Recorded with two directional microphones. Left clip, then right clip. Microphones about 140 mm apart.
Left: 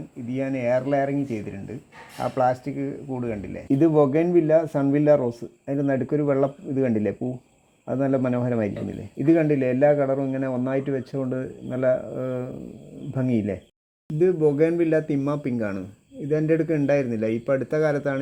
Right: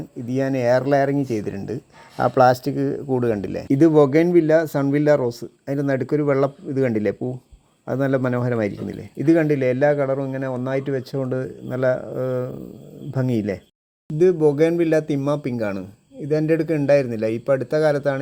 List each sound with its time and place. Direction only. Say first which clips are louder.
0.3 s speech: right 5 dB; 25° right (ahead or behind); by 3.6 s 40° right (ahead or behind)
3.7 s speech: right 4 dB; 20° right (ahead or behind)
14.2 s speech: right 3 dB; 20° right (ahead or behind)